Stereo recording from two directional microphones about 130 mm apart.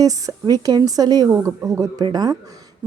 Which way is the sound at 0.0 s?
25° right (ahead or behind).